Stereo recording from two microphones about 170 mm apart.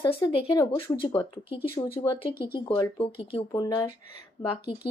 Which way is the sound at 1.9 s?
30° left (ahead or behind).